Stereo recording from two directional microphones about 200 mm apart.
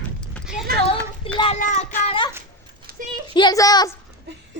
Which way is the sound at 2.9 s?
50° right (ahead or behind).